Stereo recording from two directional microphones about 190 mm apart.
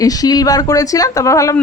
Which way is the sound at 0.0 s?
20° left (ahead or behind).